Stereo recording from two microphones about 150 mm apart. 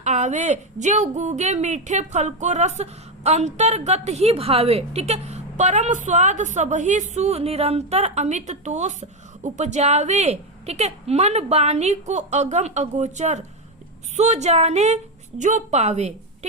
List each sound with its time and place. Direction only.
0.0 s a woman's voice: 50° right (ahead or behind)